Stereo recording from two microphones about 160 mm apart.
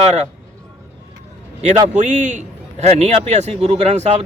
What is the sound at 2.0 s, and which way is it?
Speech, 50° right (ahead or behind).